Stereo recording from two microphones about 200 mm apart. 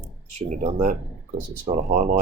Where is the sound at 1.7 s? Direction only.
45° right (ahead or behind).